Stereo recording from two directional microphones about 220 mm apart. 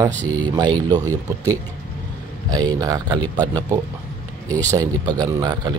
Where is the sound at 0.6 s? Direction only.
20° right (ahead or behind).